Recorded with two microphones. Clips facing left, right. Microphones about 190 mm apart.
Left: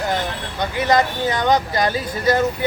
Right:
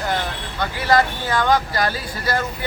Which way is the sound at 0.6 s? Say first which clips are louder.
Left 1 dB; 20° left (ahead or behind).